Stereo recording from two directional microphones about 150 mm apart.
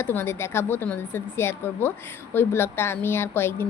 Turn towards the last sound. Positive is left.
turn(degrees=15)  # may be behind; listen again after turning